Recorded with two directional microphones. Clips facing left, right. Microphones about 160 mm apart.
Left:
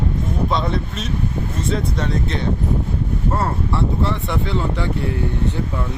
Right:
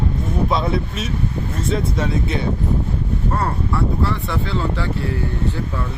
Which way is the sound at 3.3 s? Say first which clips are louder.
Even; 25° left (ahead or behind).